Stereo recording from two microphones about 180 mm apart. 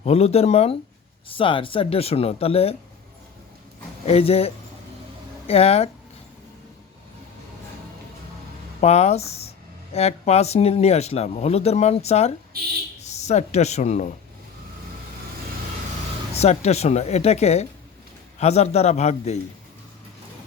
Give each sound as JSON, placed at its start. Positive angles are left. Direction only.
{"t": 0.0, "sound": "speech", "side_deg": 35}
{"t": 4.0, "sound": "speech", "side_deg": 35}
{"t": 8.8, "sound": "speech", "side_deg": 35}
{"t": 16.3, "sound": "speech", "side_deg": 35}